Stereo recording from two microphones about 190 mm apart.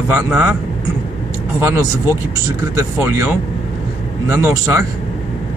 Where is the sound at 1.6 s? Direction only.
15° right (ahead or behind).